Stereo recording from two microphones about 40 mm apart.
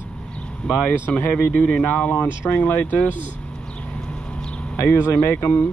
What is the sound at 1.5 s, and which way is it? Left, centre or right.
Speech, left.